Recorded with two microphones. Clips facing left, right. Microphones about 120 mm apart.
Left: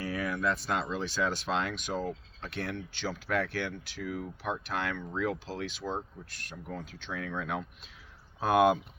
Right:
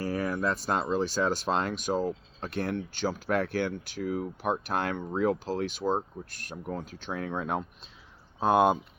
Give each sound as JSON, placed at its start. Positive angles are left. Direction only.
{"t": 0.0, "sound": "speech", "side_deg": -40}
{"t": 8.4, "sound": "speech", "side_deg": -25}